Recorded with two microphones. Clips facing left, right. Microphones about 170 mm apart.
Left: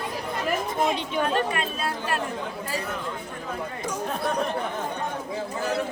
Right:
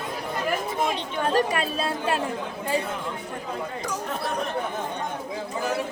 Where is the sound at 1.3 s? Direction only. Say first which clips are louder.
Right 3 dB; 35° right (ahead or behind).